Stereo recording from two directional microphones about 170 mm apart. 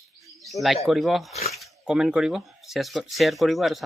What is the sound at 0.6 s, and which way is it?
A man's voice, centre (ahead or behind).